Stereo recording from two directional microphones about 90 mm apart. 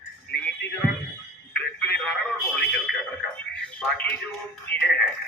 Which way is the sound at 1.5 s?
10° left (ahead or behind).